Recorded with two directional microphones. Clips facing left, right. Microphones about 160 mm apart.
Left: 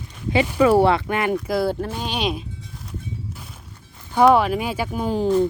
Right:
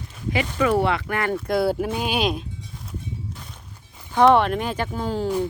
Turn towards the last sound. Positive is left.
turn(degrees=15)  # may be behind; listen again after turning